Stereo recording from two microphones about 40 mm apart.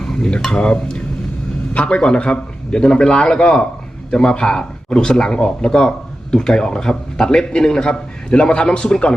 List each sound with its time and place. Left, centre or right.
0.0 s a man's voice: centre